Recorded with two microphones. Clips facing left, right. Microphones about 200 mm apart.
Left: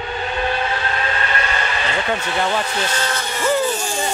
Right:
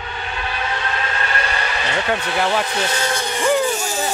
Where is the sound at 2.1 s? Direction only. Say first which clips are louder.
Right 2 dB; 5° right (ahead or behind).